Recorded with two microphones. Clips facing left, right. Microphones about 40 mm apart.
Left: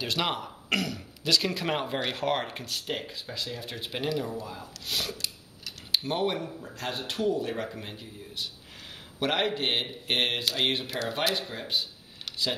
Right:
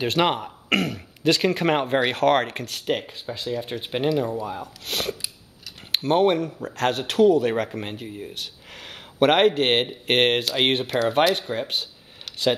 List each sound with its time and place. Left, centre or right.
0.0 s speech: right
2.0 s speech: right
3.0 s speech: right